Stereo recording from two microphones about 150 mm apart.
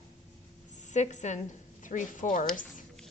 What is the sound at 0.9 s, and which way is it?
A woman's voice, 50° left (ahead or behind).